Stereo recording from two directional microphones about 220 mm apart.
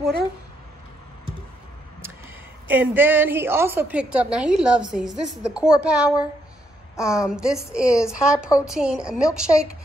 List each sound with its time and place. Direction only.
2.7 s a woman's voice: 10° right (ahead or behind)